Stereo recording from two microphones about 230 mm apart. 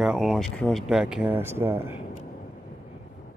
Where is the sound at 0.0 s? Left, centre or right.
Centre.